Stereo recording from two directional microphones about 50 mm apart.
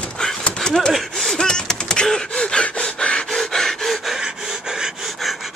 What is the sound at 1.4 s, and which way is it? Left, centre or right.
Gasp, centre.